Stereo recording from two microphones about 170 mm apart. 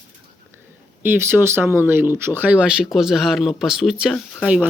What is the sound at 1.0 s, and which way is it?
Speech, 10° right (ahead or behind).